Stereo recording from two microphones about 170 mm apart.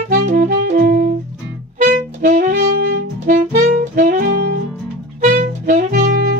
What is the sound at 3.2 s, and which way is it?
Saxophone, 50° right (ahead or behind).